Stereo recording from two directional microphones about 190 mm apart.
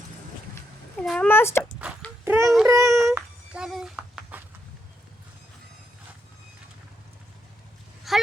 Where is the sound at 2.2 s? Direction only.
15° right (ahead or behind).